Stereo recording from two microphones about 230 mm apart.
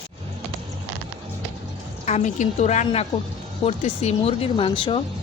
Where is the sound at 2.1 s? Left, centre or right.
Left.